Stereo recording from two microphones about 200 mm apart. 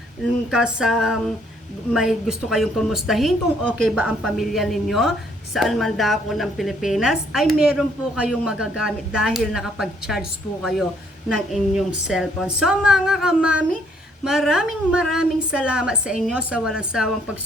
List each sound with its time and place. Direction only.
0.5 s a woman's voice: 5° right (ahead or behind)